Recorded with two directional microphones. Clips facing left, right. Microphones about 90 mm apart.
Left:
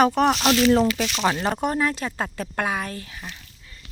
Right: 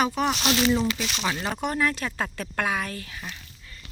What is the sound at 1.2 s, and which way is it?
Speech, 40° left (ahead or behind).